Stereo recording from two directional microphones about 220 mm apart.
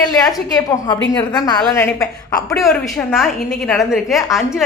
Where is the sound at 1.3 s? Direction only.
20° left (ahead or behind).